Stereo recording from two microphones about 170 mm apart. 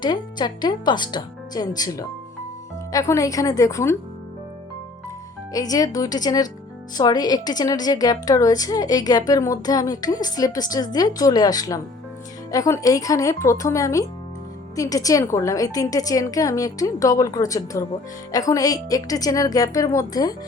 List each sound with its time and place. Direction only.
0.0 s a woman's voice: 25° left (ahead or behind)
5.5 s a woman's voice: 20° left (ahead or behind)